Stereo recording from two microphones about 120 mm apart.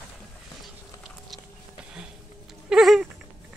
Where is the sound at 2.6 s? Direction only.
Centre (ahead or behind).